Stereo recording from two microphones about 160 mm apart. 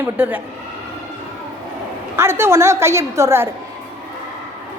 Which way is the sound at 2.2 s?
15° right (ahead or behind).